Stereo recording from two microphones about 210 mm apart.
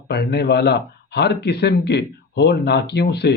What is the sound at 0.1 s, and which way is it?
Speech, 50° left (ahead or behind).